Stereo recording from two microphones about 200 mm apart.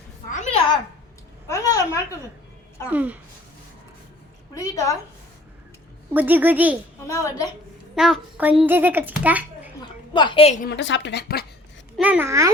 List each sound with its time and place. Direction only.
1.5 s a woman's voice: 15° left (ahead or behind)
2.9 s a woman's voice: 5° right (ahead or behind)
4.5 s a woman's voice: 15° left (ahead or behind)
6.1 s a woman's voice: 10° right (ahead or behind)
7.1 s a woman's voice: 15° left (ahead or behind)
7.9 s a woman's voice: centre (ahead or behind)
10.1 s a woman's voice: 25° left (ahead or behind)
10.7 s speech: 60° left (ahead or behind)
11.9 s a woman's voice: 5° right (ahead or behind)